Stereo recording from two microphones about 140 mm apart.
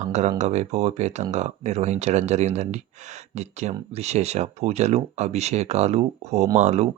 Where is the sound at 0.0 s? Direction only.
55° right (ahead or behind).